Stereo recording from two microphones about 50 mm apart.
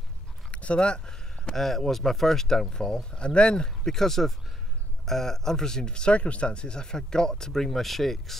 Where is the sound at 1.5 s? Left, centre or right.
Centre.